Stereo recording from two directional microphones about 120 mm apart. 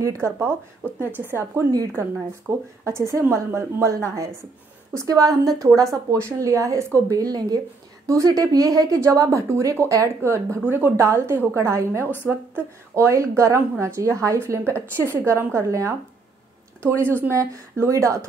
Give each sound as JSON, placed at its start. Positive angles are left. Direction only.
{"t": 0.0, "sound": "speech", "side_deg": -20}